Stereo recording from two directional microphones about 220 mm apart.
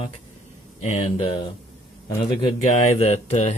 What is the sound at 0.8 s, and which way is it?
Speech, 30° left (ahead or behind).